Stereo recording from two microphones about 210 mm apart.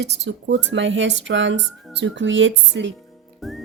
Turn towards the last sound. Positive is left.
turn(degrees=0)  # may be behind; listen again after turning